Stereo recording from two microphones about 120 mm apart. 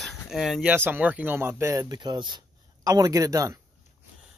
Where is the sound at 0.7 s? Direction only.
15° right (ahead or behind).